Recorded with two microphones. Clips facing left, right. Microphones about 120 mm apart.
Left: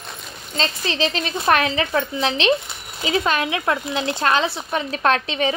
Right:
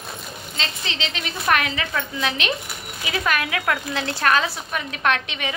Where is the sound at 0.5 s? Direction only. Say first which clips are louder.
Left 7 dB; 40° left (ahead or behind).